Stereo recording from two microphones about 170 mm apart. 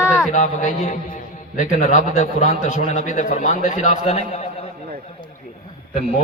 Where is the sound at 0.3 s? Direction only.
45° left (ahead or behind).